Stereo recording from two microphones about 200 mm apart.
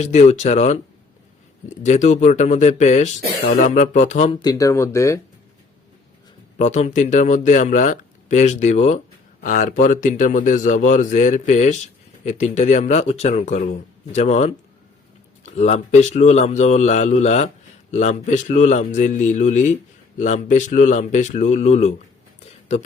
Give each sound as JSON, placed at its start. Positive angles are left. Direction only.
{"t": 0.0, "sound": "a man's voice", "side_deg": 35}
{"t": 1.8, "sound": "a man's voice", "side_deg": 35}
{"t": 4.4, "sound": "speech", "side_deg": 15}
{"t": 6.6, "sound": "a man's voice", "side_deg": 35}